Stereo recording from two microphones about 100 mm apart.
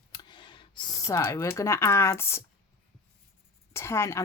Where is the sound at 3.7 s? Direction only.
25° left (ahead or behind).